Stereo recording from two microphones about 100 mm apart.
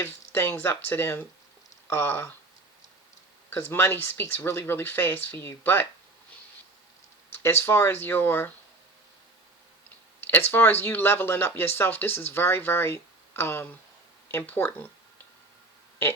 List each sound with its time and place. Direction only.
0.0 s speech: 20° left (ahead or behind)
3.5 s speech: 20° left (ahead or behind)
7.4 s speech: 25° left (ahead or behind)
10.2 s a sound: 20° left (ahead or behind)
10.5 s speech: 20° left (ahead or behind)